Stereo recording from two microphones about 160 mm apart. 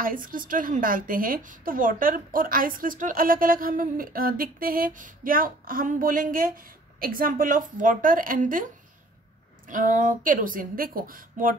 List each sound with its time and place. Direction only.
0.0 s a woman's voice: 60° right (ahead or behind)
9.7 s a woman's voice: 55° right (ahead or behind)